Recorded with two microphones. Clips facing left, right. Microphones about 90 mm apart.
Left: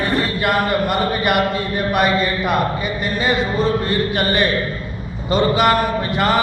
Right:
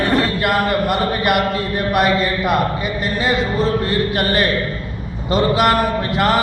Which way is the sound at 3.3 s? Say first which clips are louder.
Even; centre (ahead or behind).